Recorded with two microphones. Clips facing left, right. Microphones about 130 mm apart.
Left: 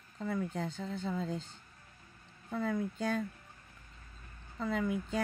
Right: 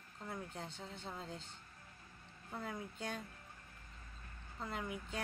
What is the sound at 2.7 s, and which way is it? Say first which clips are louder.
Speech: left 12 dB; 90° left.